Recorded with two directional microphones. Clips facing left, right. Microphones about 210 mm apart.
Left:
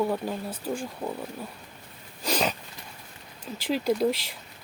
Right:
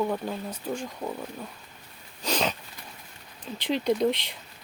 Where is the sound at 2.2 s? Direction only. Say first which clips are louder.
Left 1 dB; 5° left (ahead or behind).